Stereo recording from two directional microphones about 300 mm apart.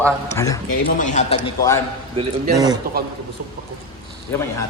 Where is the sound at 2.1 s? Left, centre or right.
Centre.